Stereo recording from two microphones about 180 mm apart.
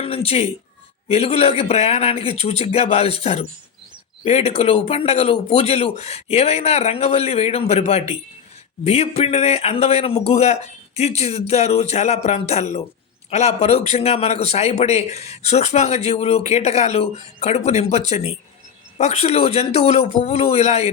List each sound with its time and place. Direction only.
0.0 s a woman's voice: 30° left (ahead or behind)